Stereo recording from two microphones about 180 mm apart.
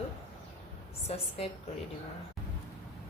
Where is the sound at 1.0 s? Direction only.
35° left (ahead or behind).